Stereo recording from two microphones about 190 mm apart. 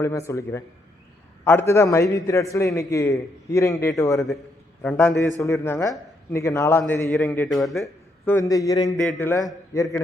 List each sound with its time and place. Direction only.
0.0 s a man's voice: 15° left (ahead or behind)